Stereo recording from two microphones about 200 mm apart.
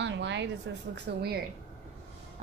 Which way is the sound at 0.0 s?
65° right (ahead or behind).